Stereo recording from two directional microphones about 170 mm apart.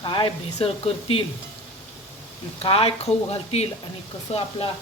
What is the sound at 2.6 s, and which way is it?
Speech, 35° left (ahead or behind).